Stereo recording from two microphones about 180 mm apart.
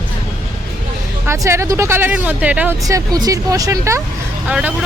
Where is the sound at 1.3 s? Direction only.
15° right (ahead or behind).